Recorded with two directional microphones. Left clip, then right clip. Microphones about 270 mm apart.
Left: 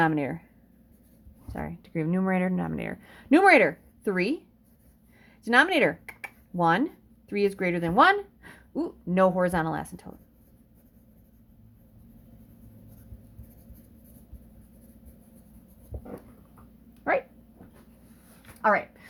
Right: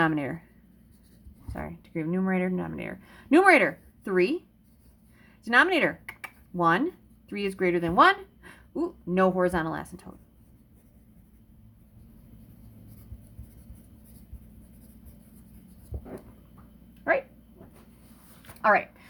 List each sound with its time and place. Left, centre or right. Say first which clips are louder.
0.0 s speech: left 1 dB; centre
1.5 s speech: left 2 dB; centre
5.5 s a woman's voice: left 1 dB; centre
17.1 s dog: right 1 dB; left
18.6 s a sound: right 1 dB; centre